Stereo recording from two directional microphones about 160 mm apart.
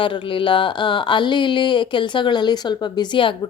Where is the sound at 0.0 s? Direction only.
30° left (ahead or behind).